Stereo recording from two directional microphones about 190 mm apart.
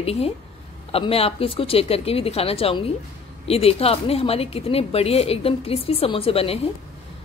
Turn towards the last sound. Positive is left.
turn(degrees=30)  # may be behind; listen again after turning